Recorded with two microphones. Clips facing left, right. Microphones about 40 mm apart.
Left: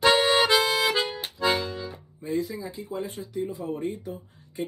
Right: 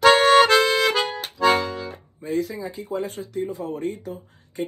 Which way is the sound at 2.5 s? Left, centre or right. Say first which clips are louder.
Right 4 dB; right.